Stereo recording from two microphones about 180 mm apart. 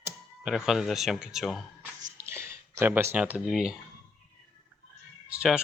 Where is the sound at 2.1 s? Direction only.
15° right (ahead or behind).